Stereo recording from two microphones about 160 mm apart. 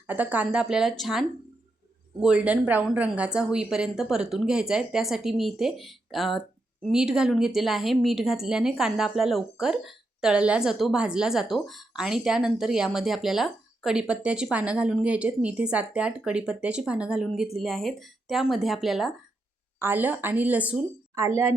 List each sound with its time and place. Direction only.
0.1 s speech: 10° right (ahead or behind)
2.2 s speech: 5° right (ahead or behind)
19.8 s a woman's voice: 10° right (ahead or behind)